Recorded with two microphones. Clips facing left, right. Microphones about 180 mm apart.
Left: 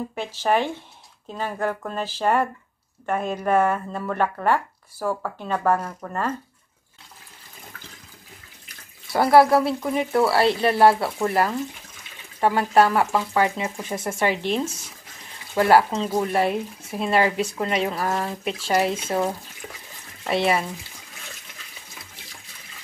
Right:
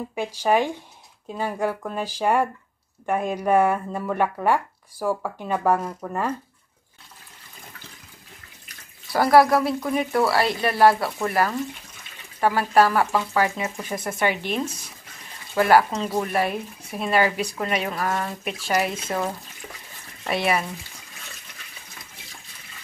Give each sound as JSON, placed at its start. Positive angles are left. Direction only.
{"t": 0.1, "sound": "speech", "side_deg": -10}
{"t": 9.1, "sound": "speech", "side_deg": 25}